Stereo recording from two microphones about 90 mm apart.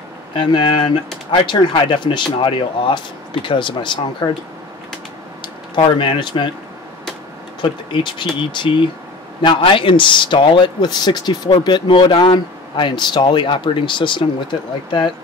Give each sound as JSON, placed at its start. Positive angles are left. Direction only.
{"t": 0.4, "sound": "speech", "side_deg": 65}
{"t": 5.4, "sound": "speech", "side_deg": 65}
{"t": 7.6, "sound": "speech", "side_deg": 65}
{"t": 12.2, "sound": "speech", "side_deg": 60}